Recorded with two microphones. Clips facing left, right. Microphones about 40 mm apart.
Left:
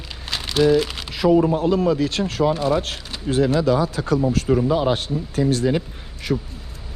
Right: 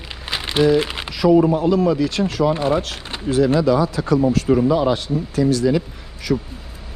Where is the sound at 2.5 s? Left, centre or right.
Right.